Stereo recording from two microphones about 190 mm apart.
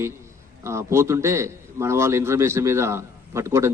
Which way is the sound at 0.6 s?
15° right (ahead or behind).